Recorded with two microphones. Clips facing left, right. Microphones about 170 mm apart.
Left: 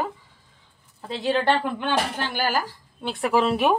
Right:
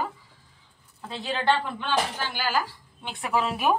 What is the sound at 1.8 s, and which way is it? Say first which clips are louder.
Speech: left 2 dB; 60° left (ahead or behind).